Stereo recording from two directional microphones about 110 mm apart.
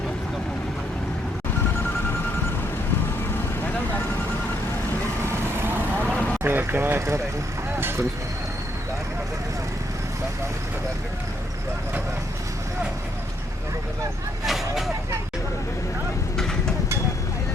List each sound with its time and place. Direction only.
5.5 s vehicle: 20° right (ahead or behind)
6.1 s vehicle: 10° left (ahead or behind)
6.4 s a sound: 20° right (ahead or behind)
7.8 s vehicle: 20° right (ahead or behind)
14.4 s vehicle: centre (ahead or behind)
16.4 s a sound: 5° left (ahead or behind)